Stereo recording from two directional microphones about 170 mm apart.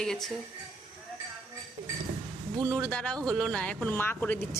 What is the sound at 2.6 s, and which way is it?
Speech, 20° right (ahead or behind).